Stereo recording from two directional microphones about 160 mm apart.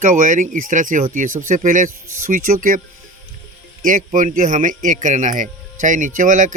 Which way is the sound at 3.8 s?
55° right (ahead or behind).